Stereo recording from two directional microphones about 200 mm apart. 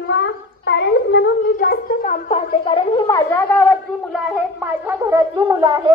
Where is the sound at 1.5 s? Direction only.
45° left (ahead or behind); by 3.2 s 25° left (ahead or behind).